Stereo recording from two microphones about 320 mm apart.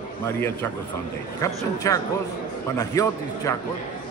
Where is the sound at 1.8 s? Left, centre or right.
Centre.